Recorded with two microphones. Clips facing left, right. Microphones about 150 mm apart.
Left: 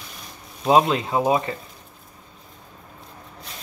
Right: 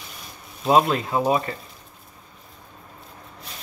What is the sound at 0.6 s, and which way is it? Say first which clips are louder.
Speech: left 1 dB; 20° left (ahead or behind).